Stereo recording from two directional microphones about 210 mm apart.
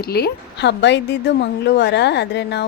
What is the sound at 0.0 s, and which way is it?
A woman's voice, 45° left (ahead or behind).